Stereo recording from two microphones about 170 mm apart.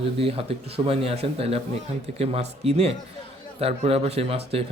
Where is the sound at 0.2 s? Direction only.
35° right (ahead or behind).